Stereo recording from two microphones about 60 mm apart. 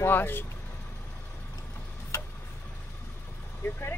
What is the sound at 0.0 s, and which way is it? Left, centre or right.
Speech, left.